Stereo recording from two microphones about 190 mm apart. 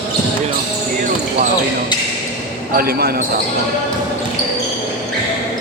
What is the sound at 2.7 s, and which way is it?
Speech, 50° right (ahead or behind).